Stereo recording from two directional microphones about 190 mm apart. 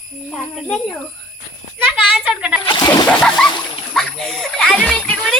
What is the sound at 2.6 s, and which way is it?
Splash, 20° left (ahead or behind).